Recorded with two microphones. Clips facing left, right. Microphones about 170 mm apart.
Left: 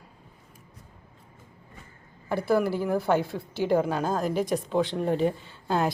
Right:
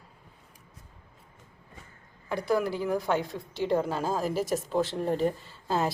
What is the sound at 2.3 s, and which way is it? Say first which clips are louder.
A woman's voice: left 3 dB; 5° left (ahead or behind).